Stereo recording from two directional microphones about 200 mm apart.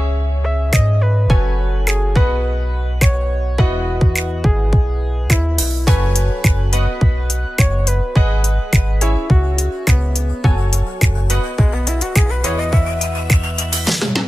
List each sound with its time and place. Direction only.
0.7 s music: centre (ahead or behind)
3.5 s music: centre (ahead or behind)
12.1 s music: centre (ahead or behind)